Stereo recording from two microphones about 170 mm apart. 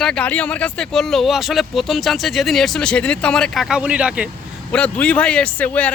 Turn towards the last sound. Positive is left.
turn(degrees=10)  # may be behind; listen again after turning